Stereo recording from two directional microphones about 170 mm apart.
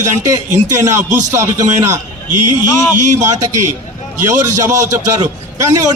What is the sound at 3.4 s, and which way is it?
A man's voice, 20° right (ahead or behind).